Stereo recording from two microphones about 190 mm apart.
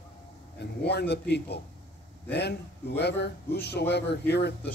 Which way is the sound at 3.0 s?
60° left (ahead or behind).